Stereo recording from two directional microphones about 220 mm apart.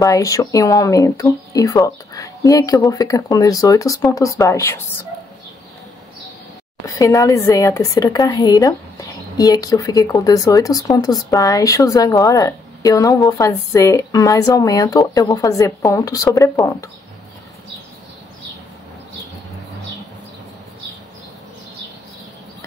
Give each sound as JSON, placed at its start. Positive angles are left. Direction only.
{"t": 0.0, "sound": "a woman's voice", "side_deg": 15}
{"t": 6.9, "sound": "a woman's voice", "side_deg": 15}